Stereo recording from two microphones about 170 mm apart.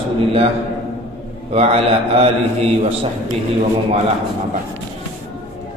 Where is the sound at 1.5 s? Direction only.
35° right (ahead or behind).